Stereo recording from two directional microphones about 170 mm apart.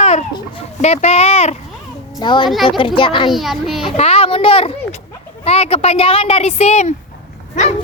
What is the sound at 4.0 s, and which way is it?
Speech, 35° left (ahead or behind).